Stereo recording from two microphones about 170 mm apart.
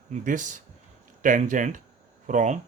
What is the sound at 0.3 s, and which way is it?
Speech, 50° right (ahead or behind).